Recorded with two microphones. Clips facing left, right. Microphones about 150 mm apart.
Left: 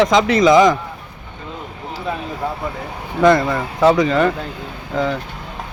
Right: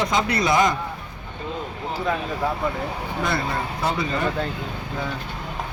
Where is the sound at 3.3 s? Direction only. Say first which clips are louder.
Left 13 dB; 90° left.